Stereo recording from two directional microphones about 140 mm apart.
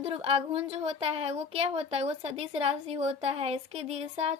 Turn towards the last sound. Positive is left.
turn(degrees=-45)  # may be behind; listen again after turning